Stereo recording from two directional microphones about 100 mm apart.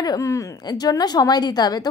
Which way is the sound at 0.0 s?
35° left (ahead or behind).